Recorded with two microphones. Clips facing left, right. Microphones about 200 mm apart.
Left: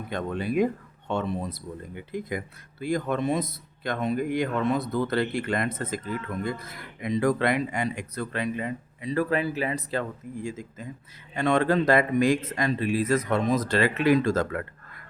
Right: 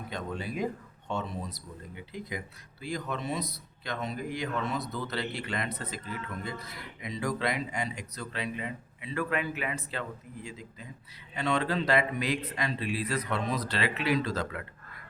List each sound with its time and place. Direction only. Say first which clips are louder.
0.1 s a man's voice: left 8 dB; 55° left (ahead or behind)